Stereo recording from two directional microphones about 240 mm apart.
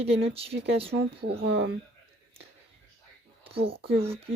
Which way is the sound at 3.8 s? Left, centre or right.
Right.